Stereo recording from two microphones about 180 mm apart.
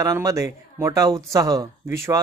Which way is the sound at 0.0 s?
20° right (ahead or behind).